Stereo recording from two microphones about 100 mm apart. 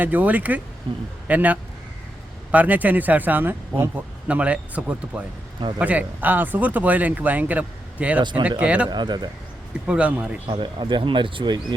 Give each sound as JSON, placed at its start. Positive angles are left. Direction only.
{"t": 0.0, "sound": "speech", "side_deg": -15}
{"t": 0.9, "sound": "speech", "side_deg": -55}
{"t": 1.3, "sound": "speech", "side_deg": -15}
{"t": 8.2, "sound": "speech", "side_deg": -50}
{"t": 8.4, "sound": "speech", "side_deg": -15}
{"t": 8.9, "sound": "speech", "side_deg": -45}
{"t": 9.8, "sound": "speech", "side_deg": -10}
{"t": 10.4, "sound": "speech", "side_deg": -55}